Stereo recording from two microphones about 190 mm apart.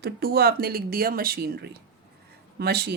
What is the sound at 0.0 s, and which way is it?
Speech, 55° right (ahead or behind).